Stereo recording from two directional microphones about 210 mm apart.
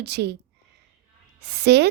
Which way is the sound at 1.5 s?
50° right (ahead or behind).